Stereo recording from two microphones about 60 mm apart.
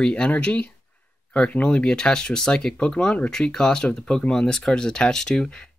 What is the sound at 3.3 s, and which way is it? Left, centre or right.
Speech, centre.